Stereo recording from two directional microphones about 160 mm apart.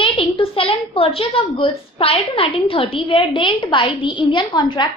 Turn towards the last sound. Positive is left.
turn(degrees=25)  # may be behind; listen again after turning